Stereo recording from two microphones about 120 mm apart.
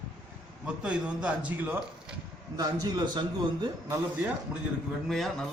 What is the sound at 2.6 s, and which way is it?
Speech, 35° right (ahead or behind).